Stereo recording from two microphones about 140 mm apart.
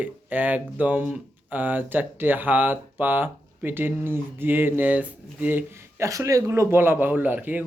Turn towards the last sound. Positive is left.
turn(degrees=-10)  # may be behind; listen again after turning